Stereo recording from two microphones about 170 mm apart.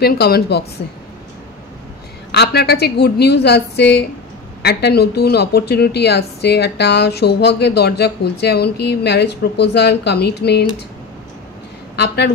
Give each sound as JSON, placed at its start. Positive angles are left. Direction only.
{"t": 0.0, "sound": "a woman's voice", "side_deg": 70}
{"t": 2.3, "sound": "a woman's voice", "side_deg": 75}